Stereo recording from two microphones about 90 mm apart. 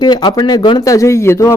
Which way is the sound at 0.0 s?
50° left (ahead or behind).